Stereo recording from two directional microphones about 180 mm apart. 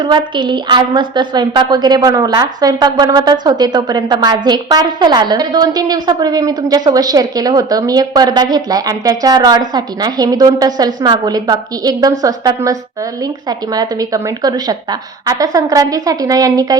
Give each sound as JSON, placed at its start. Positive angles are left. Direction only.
{"t": 0.0, "sound": "a woman's voice", "side_deg": -25}